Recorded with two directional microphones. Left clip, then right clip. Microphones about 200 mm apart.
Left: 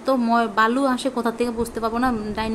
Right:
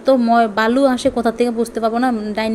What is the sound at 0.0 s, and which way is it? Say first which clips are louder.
A woman's voice: right 7 dB; 15° right (ahead or behind).